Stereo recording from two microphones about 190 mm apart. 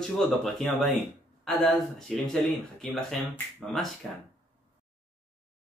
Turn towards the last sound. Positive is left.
turn(degrees=0)  # may be behind; listen again after turning